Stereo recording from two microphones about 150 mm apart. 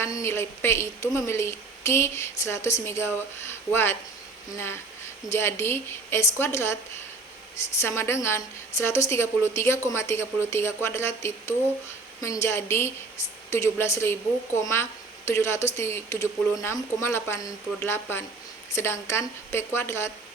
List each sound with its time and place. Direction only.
0.0 s a woman's voice: 20° left (ahead or behind)
5.3 s a woman's voice: 15° left (ahead or behind)
7.8 s a woman's voice: 15° left (ahead or behind)